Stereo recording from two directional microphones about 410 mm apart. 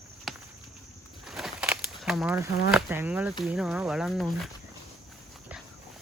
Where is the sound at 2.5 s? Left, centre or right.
Left.